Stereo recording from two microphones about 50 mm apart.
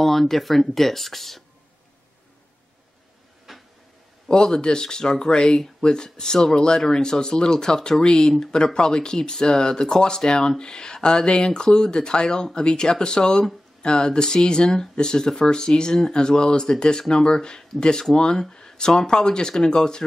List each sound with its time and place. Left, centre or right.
0.0 s speech: centre
3.5 s a sound: centre
4.3 s speech: centre